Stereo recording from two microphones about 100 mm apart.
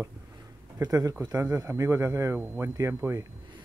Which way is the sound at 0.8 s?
35° right (ahead or behind).